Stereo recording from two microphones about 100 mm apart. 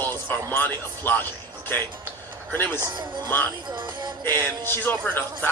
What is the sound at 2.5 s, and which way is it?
Speech, 20° left (ahead or behind).